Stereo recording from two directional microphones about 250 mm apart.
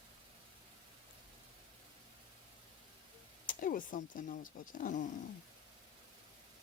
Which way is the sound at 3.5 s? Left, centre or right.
Left.